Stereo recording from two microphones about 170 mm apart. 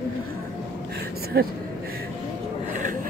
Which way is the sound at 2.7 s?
50° right (ahead or behind).